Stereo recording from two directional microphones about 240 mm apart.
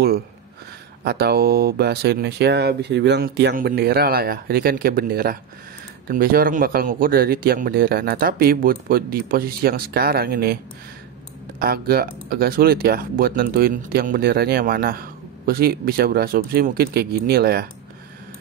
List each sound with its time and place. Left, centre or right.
1.0 s speech: right
11.6 s speech: right